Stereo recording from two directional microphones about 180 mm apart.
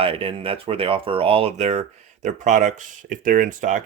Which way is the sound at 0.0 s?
30° right (ahead or behind).